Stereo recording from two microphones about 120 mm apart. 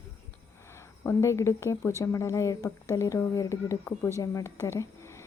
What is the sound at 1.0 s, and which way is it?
Speech, 25° left (ahead or behind).